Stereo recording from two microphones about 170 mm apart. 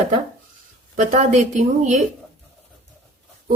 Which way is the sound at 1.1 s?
45° right (ahead or behind).